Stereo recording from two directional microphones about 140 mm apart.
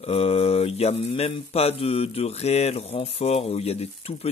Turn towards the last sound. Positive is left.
turn(degrees=45)  # may be behind; listen again after turning